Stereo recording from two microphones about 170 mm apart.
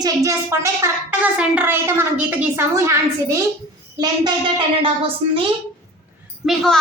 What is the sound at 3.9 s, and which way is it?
A child's voice, 25° right (ahead or behind).